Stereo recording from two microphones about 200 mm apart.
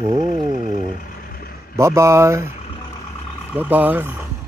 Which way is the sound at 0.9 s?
45° left (ahead or behind).